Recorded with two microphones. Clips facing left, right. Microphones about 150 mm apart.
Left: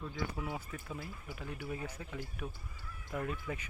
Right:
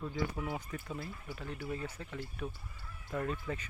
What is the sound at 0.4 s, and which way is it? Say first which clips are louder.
Speech: right 2 dB; centre (ahead or behind).